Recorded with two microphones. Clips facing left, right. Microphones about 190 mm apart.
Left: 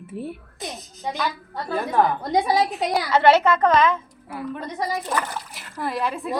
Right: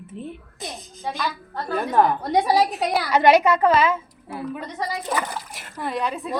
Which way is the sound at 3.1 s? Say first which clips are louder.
Right 1 dB; 15° right (ahead or behind).